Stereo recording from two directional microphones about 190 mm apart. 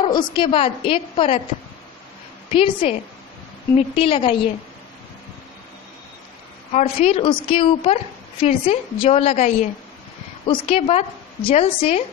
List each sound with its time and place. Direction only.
0.0 s a woman's voice: 25° left (ahead or behind)
2.5 s a woman's voice: 30° left (ahead or behind)
6.7 s a woman's voice: 35° left (ahead or behind)